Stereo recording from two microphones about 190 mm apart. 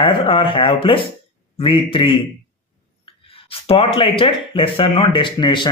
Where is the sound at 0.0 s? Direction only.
30° left (ahead or behind).